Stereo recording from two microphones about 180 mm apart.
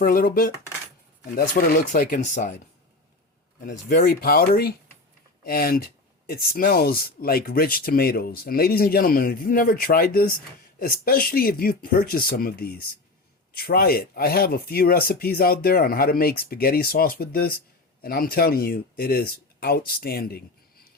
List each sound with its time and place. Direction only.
0.0 s speech: 55° left (ahead or behind)
3.6 s speech: 55° left (ahead or behind)